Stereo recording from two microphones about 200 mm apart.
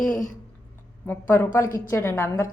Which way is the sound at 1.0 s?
10° left (ahead or behind).